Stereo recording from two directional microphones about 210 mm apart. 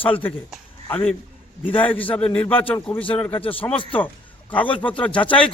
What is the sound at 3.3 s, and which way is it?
Speech, 25° left (ahead or behind).